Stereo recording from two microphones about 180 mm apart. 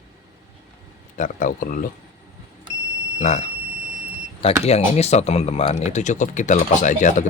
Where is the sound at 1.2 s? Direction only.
45° left (ahead or behind).